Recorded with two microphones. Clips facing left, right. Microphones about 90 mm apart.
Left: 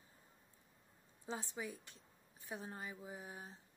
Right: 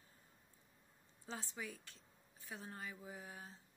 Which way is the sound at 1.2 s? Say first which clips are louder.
Left 3 dB; 20° left (ahead or behind).